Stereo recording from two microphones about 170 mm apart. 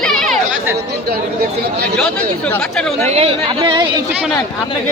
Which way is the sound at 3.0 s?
35° right (ahead or behind).